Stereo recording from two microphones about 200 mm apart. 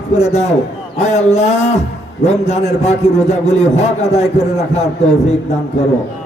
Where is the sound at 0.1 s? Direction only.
35° left (ahead or behind).